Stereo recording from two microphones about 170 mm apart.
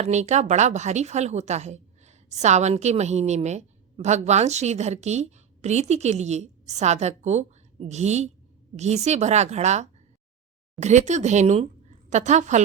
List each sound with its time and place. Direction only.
0.0 s a woman's voice: 45° right (ahead or behind)